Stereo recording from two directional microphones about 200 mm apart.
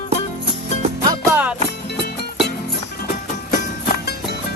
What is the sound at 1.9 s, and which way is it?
Music, 55° left (ahead or behind).